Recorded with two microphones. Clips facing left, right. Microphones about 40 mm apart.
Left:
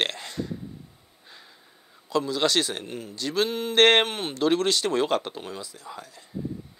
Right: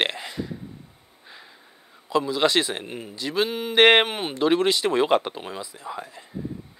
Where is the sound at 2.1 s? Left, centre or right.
Centre.